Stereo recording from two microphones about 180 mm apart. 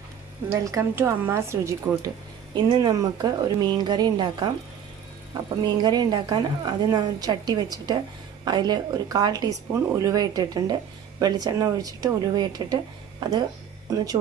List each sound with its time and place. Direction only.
0.7 s a woman's voice: 15° right (ahead or behind)
5.6 s speech: 25° right (ahead or behind)